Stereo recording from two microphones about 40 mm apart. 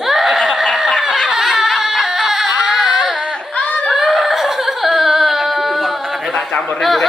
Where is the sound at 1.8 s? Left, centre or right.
Centre.